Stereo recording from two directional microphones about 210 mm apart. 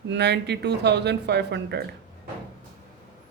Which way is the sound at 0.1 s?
55° right (ahead or behind).